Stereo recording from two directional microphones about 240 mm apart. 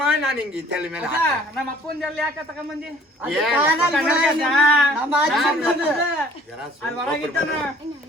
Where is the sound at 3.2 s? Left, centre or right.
Centre.